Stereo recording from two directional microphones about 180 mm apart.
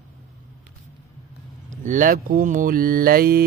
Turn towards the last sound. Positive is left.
turn(degrees=-55)  # may be behind; listen again after turning